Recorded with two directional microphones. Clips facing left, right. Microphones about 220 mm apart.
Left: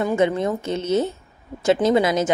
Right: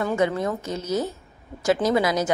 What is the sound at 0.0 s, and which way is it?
A woman's voice, 20° left (ahead or behind).